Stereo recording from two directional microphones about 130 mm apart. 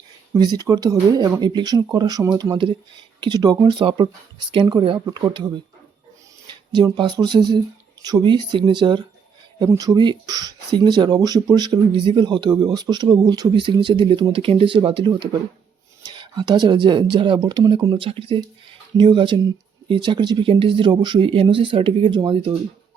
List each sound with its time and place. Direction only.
0.3 s speech: 30° right (ahead or behind)